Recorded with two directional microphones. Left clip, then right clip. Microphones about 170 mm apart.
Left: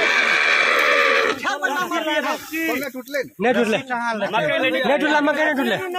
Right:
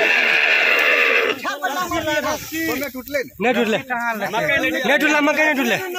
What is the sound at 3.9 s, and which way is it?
Speech, 90° left.